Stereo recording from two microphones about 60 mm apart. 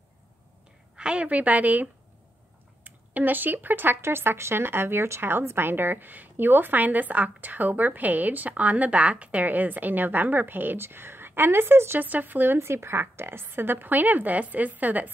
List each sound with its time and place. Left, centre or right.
0.9 s a woman's voice: centre; by 12.0 s right
12.0 s speech: right
12.5 s speech: right